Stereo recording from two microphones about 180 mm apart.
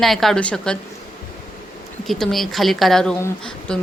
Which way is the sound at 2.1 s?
Centre (ahead or behind).